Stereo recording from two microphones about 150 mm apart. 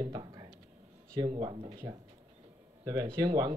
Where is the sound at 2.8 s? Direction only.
25° right (ahead or behind).